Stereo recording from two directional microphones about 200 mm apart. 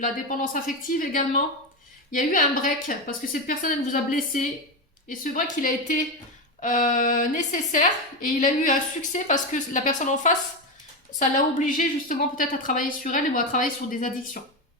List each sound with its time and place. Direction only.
0.0 s a woman's voice: 45° left (ahead or behind)